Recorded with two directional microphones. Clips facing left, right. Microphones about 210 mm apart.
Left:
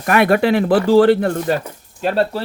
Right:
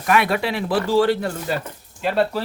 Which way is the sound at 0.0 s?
50° left (ahead or behind).